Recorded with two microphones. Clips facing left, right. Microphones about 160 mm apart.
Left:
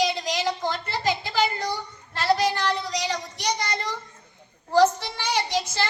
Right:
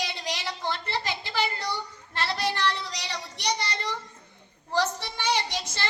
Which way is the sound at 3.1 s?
45° left (ahead or behind).